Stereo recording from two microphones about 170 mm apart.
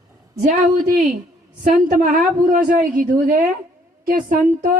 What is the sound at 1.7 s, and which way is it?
A woman's voice, 50° right (ahead or behind).